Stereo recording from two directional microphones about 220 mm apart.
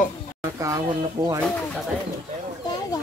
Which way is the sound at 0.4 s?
15° right (ahead or behind).